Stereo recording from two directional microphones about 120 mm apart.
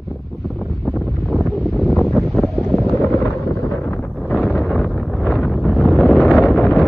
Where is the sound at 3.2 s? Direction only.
25° left (ahead or behind).